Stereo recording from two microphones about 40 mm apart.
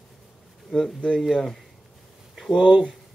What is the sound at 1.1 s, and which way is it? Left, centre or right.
Speech, centre.